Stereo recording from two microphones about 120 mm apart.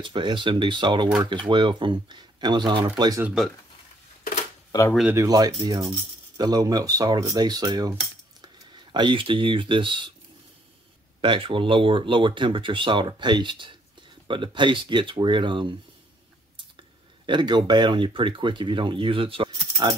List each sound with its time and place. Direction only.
0.0 s speech: 40° right (ahead or behind)
3.0 s speech: 30° right (ahead or behind)
5.1 s speech: 30° right (ahead or behind)
8.9 s speech: 45° right (ahead or behind)
11.1 s speech: 45° right (ahead or behind)
17.3 s speech: 40° right (ahead or behind)